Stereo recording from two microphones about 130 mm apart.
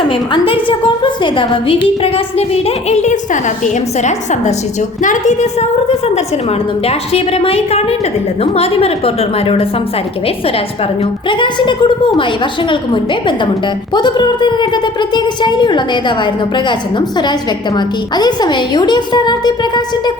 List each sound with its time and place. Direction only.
0.1 s a woman's voice: 40° left (ahead or behind)
11.3 s a woman's voice: 40° left (ahead or behind)
17.7 s a woman's voice: 35° left (ahead or behind)